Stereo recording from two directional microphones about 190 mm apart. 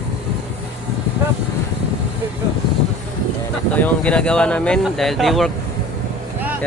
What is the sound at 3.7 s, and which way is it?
Speech, 5° left (ahead or behind).